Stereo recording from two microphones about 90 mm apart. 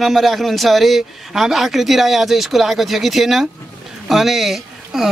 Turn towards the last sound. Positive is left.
turn(degrees=-5)  # may be behind; listen again after turning